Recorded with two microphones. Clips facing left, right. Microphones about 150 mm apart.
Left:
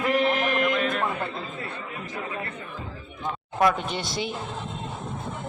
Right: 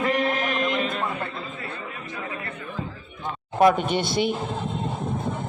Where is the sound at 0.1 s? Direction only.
5° left (ahead or behind).